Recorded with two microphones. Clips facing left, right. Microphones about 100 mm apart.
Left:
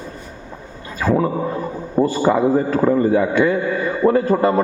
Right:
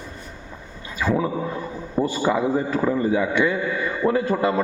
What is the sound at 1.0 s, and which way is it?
Speech, 50° left (ahead or behind).